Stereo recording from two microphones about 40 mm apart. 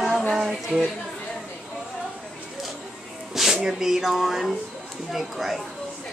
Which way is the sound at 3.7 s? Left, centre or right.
Centre.